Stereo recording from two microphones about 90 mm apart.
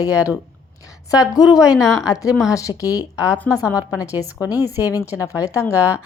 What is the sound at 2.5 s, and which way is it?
Speech, 40° left (ahead or behind).